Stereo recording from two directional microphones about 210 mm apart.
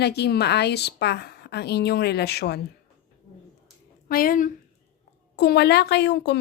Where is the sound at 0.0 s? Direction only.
50° left (ahead or behind).